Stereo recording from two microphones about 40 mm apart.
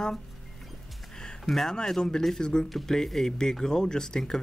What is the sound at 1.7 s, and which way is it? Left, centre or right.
Speech, centre.